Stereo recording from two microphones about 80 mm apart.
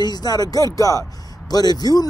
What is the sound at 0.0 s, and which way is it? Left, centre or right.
Speech, left.